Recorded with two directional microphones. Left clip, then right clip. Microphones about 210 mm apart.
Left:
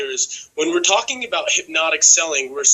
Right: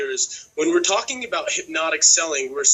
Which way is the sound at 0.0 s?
15° right (ahead or behind).